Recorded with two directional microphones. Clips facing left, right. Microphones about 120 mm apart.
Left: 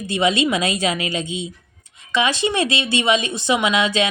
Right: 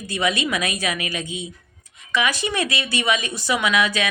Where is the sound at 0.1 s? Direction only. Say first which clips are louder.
Left 4 dB; 25° left (ahead or behind).